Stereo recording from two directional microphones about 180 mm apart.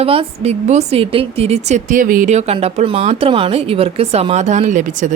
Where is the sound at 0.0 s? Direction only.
30° right (ahead or behind).